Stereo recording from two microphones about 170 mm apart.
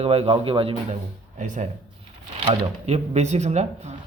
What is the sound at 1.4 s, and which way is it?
A man's voice, 45° right (ahead or behind).